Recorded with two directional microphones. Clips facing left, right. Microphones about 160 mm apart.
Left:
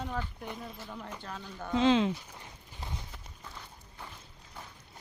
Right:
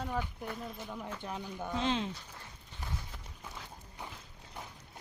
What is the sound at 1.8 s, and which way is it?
Speech, 90° left.